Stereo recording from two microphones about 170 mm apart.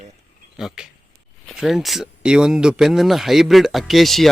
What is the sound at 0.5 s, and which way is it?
Speech, 5° right (ahead or behind).